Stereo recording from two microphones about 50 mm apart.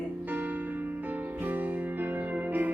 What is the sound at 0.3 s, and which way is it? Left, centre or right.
Music, right.